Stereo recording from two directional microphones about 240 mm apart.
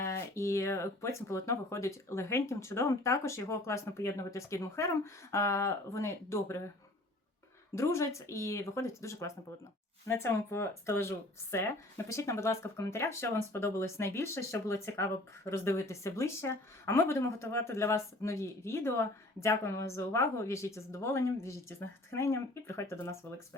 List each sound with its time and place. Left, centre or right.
0.0 s speech: centre
7.8 s speech: centre